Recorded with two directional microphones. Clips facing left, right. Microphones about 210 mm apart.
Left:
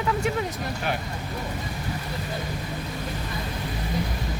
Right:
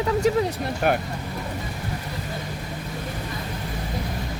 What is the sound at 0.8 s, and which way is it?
Speech, 50° right (ahead or behind).